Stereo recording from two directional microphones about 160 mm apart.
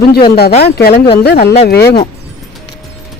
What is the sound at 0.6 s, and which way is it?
Speech, 85° left.